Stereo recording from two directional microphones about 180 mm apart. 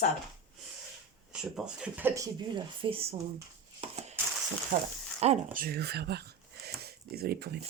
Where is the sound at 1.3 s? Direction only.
5° right (ahead or behind); by 3.2 s 30° right (ahead or behind).